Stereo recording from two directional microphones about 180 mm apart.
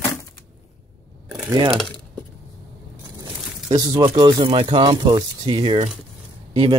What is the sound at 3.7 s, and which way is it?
Speech, 25° right (ahead or behind).